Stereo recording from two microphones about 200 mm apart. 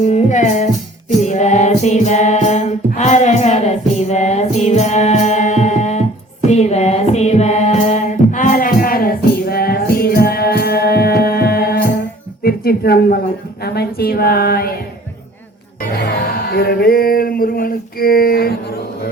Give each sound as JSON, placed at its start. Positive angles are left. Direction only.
{"t": 0.0, "sound": "music", "side_deg": 35}
{"t": 12.4, "sound": "a sound", "side_deg": 50}
{"t": 13.7, "sound": "a woman's voice", "side_deg": 50}
{"t": 15.8, "sound": "music", "side_deg": 50}